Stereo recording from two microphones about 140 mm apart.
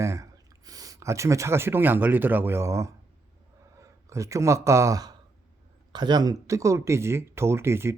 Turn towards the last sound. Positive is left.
turn(degrees=-20)  # may be behind; listen again after turning